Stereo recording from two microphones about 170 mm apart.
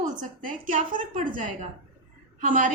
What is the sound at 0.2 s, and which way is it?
A woman's voice, 50° right (ahead or behind).